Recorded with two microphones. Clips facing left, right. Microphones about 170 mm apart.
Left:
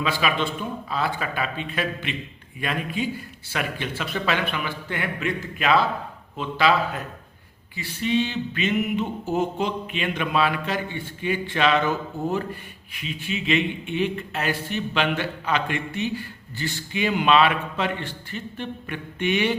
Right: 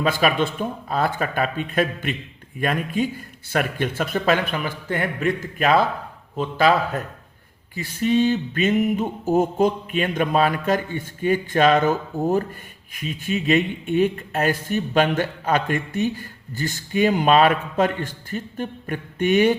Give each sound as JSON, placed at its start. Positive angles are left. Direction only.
{"t": 0.0, "sound": "speech", "side_deg": -45}